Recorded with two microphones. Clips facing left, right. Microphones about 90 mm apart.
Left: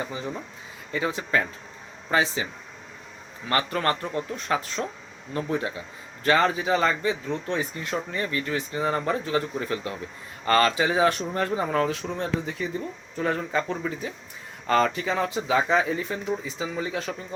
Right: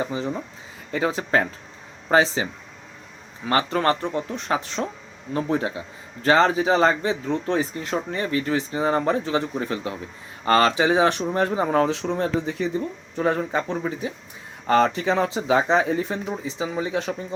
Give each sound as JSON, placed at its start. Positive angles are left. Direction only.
{"t": 0.0, "sound": "speech", "side_deg": -30}
{"t": 0.9, "sound": "speech", "side_deg": -40}
{"t": 2.0, "sound": "speech", "side_deg": -35}
{"t": 3.5, "sound": "speech", "side_deg": -30}
{"t": 13.1, "sound": "speech", "side_deg": -25}